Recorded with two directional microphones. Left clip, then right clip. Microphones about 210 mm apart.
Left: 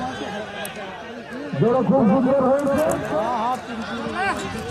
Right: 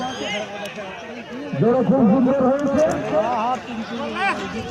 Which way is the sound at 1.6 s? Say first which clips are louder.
Right 1 dB; 40° right (ahead or behind).